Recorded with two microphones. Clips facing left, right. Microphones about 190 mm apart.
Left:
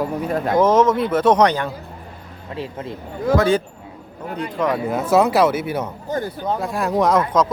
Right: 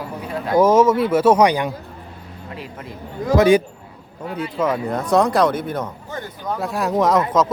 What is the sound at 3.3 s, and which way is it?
Speech, 15° right (ahead or behind).